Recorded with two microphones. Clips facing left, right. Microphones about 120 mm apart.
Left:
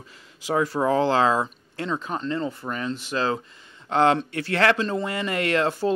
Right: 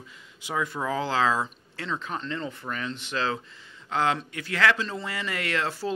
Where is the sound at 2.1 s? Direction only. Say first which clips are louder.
Left 5 dB; 35° left (ahead or behind).